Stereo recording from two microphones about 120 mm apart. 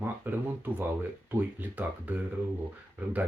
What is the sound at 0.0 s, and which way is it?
Speech, 15° right (ahead or behind).